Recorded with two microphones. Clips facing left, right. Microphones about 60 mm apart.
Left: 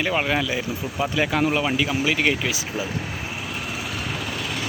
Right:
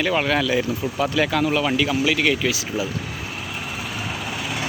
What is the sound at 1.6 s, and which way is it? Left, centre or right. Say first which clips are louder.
Speech: right 2 dB; centre.